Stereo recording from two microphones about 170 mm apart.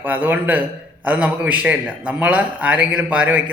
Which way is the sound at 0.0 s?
10° right (ahead or behind).